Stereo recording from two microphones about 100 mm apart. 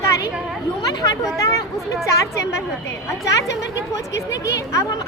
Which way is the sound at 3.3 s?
30° left (ahead or behind).